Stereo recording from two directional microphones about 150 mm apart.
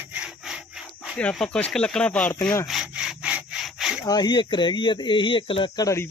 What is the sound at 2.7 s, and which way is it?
Sawing, 5° right (ahead or behind).